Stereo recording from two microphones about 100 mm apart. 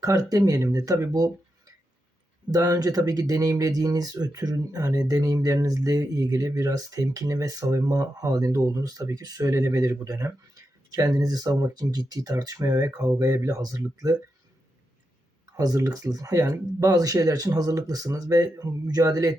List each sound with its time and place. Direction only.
0.0 s speech: 40° right (ahead or behind)
2.5 s speech: 35° right (ahead or behind)
15.5 s speech: 35° right (ahead or behind)